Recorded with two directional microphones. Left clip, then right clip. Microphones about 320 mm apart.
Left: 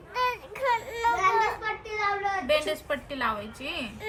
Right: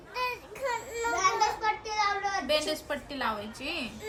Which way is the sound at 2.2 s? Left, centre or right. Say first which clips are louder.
Left 3 dB; centre.